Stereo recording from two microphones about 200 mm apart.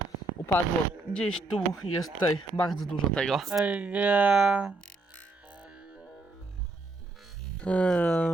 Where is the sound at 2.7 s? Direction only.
5° left (ahead or behind).